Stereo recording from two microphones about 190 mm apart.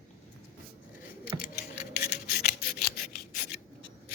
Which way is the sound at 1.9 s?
55° left (ahead or behind).